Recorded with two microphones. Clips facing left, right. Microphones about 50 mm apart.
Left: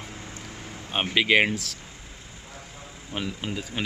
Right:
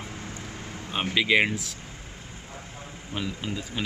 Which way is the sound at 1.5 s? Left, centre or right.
Left.